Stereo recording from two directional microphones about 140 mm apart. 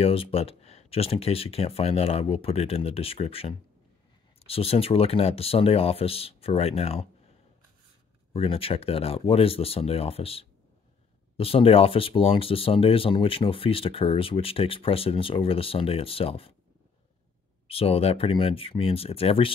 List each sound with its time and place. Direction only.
0.0 s speech: 45° left (ahead or behind)
8.3 s speech: 40° left (ahead or behind)
17.6 s speech: 45° left (ahead or behind)